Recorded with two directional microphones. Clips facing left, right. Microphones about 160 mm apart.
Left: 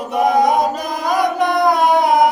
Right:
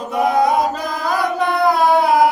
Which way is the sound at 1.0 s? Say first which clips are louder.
Left 3 dB; 15° left (ahead or behind).